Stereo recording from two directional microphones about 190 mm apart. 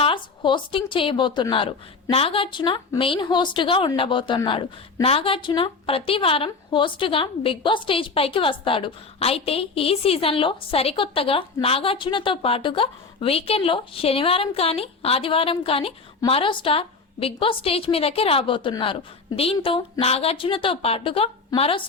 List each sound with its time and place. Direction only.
0.0 s speech: 25° left (ahead or behind)